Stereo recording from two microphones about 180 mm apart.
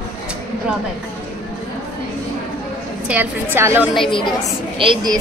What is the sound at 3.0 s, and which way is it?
Speech, 10° right (ahead or behind).